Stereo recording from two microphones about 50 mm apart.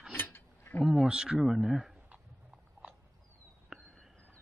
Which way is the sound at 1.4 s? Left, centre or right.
Centre.